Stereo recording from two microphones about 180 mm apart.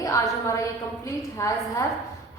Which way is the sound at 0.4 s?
15° left (ahead or behind).